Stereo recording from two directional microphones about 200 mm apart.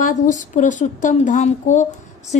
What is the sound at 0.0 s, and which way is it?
A woman's voice, 40° left (ahead or behind).